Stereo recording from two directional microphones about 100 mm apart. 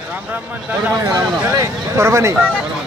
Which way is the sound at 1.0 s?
35° right (ahead or behind).